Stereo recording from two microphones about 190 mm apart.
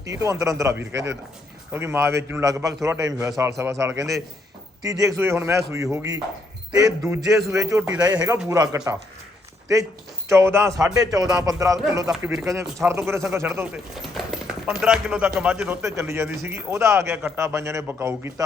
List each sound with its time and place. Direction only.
0.0 s a man's voice: 15° right (ahead or behind)
10.2 s a man's voice: 15° right (ahead or behind)
13.9 s a man's voice: centre (ahead or behind)